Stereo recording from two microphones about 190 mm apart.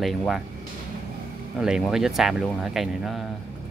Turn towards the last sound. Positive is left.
turn(degrees=0)  # may be behind; listen again after turning